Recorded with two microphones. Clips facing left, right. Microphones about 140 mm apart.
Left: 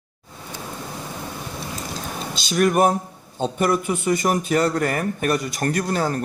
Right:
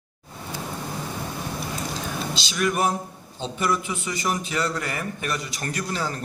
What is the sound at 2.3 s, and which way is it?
A man's voice, 50° left (ahead or behind).